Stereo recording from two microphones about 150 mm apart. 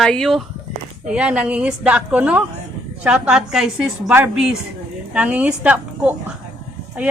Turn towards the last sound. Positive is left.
turn(degrees=-10)  # may be behind; listen again after turning